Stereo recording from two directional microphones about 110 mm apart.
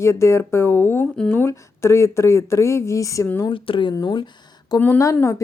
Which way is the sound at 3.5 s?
50° left (ahead or behind).